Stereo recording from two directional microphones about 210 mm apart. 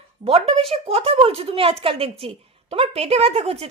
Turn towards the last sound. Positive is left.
turn(degrees=-30)  # may be behind; listen again after turning